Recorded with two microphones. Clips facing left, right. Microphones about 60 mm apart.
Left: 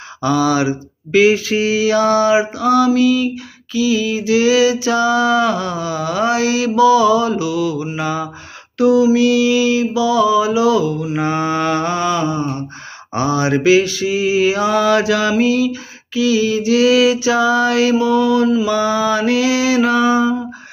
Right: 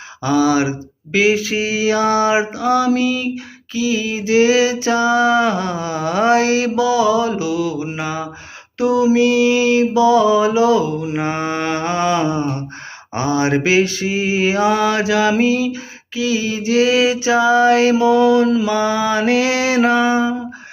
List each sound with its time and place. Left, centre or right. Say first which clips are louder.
0.2 s mantra: even; centre
1.1 s mantra: left 3 dB; centre
8.8 s mantra: left 2 dB; right
18.3 s mantra: right 1 dB; right
18.7 s mantra: left 1 dB; right